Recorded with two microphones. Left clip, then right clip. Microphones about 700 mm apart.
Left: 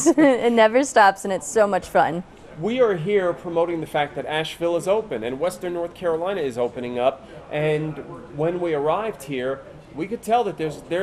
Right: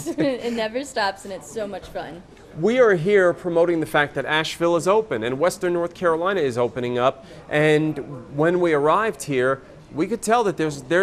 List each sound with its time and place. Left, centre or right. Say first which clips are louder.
0.0 s a woman's voice: left 7 dB; left
2.6 s speech: right 3 dB; right